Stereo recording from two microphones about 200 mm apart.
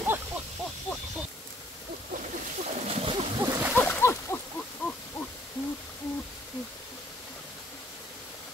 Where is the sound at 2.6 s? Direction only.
30° right (ahead or behind).